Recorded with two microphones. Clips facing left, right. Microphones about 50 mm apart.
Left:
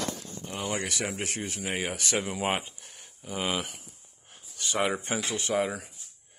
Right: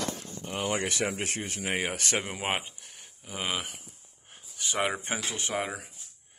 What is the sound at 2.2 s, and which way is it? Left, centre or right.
Speech, right.